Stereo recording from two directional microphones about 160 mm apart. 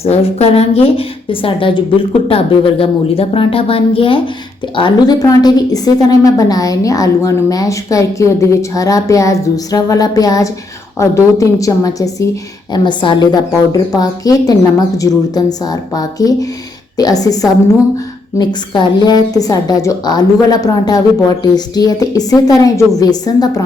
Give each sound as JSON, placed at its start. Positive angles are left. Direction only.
{"t": 0.0, "sound": "a woman's voice", "side_deg": 40}